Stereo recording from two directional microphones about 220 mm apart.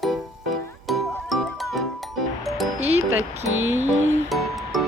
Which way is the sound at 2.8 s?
30° right (ahead or behind).